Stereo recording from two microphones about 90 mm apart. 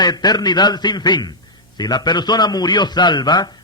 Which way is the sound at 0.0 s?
50° left (ahead or behind).